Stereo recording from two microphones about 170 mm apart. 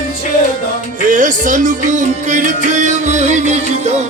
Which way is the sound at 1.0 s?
50° right (ahead or behind).